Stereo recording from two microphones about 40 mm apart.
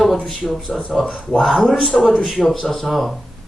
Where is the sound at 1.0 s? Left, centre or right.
Left.